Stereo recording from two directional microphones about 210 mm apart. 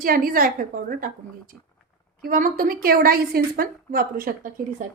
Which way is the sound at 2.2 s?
40° right (ahead or behind).